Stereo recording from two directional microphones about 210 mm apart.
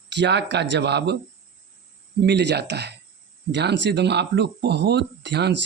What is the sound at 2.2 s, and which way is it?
Speech, 55° right (ahead or behind).